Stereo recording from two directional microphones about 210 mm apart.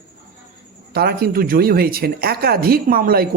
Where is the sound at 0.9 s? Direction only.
45° right (ahead or behind).